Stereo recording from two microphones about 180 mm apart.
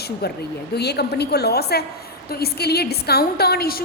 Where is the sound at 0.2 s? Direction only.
60° left (ahead or behind).